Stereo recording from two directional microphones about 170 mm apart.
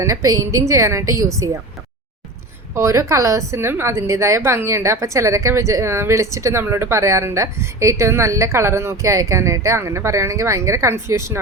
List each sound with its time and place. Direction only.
0.0 s a woman's voice: 20° right (ahead or behind)
2.7 s a woman's voice: 15° right (ahead or behind)